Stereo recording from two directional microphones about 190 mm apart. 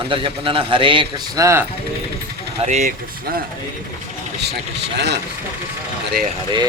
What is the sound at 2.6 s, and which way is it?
Speech, 35° right (ahead or behind).